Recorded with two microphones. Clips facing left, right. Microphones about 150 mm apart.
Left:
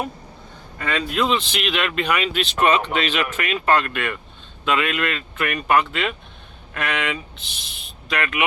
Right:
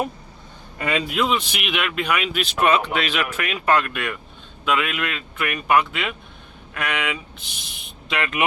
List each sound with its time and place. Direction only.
0.8 s speech: 10° right (ahead or behind)
8.0 s speech: 25° right (ahead or behind)